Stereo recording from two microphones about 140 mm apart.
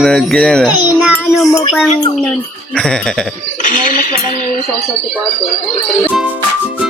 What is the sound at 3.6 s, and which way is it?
Speech, 70° left (ahead or behind).